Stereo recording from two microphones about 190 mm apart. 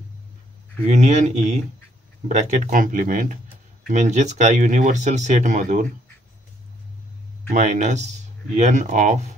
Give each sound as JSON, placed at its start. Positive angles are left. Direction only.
{"t": 0.8, "sound": "speech", "side_deg": -40}
{"t": 7.5, "sound": "speech", "side_deg": -40}